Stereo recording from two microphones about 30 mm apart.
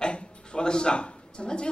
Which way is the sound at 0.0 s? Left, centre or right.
Left.